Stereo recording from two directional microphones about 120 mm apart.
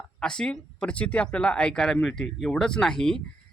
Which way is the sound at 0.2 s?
5° left (ahead or behind).